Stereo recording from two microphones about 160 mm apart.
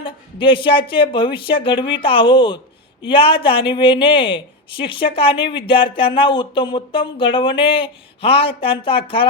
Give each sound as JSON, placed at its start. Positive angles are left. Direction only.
{"t": 0.0, "sound": "speech", "side_deg": 30}